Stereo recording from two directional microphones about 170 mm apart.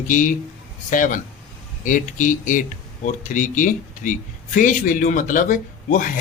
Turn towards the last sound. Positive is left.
turn(degrees=50)  # may be behind; listen again after turning